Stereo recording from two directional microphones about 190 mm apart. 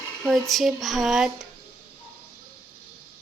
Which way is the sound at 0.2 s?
Centre (ahead or behind).